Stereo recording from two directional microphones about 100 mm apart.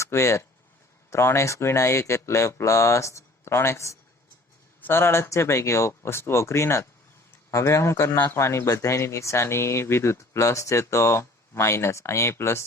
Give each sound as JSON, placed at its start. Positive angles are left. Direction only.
{"t": 0.0, "sound": "speech", "side_deg": 30}